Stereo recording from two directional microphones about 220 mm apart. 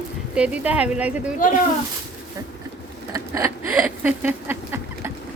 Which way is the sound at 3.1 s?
15° right (ahead or behind).